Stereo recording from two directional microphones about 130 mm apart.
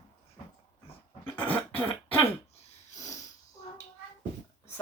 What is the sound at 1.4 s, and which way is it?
Cough, 15° left (ahead or behind).